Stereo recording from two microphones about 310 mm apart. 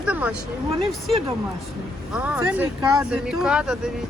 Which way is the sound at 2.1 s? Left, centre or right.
Centre.